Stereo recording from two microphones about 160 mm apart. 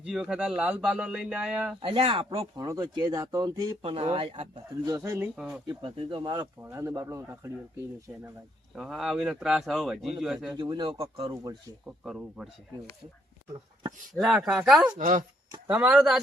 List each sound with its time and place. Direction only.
0.1 s speech: 5° right (ahead or behind)
1.8 s speech: 30° right (ahead or behind)
2.6 s speech: 20° right (ahead or behind)
4.9 s speech: 15° right (ahead or behind)
5.4 s speech: 5° right (ahead or behind)
5.6 s speech: 30° right (ahead or behind); by 8.2 s 15° right (ahead or behind)
8.7 s speech: centre (ahead or behind)
10.5 s speech: 25° right (ahead or behind)
11.2 s speech: 25° right (ahead or behind)
11.9 s speech: 5° right (ahead or behind)
14.1 s speech: centre (ahead or behind)
14.9 s speech: 50° right (ahead or behind)
15.6 s speech: 10° right (ahead or behind)